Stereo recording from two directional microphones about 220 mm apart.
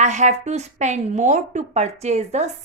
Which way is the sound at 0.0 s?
30° right (ahead or behind).